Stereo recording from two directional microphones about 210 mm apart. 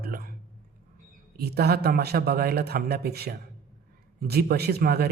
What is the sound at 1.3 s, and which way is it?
A man's voice, 50° right (ahead or behind).